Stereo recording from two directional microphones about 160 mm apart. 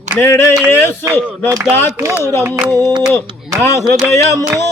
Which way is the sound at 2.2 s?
15° left (ahead or behind).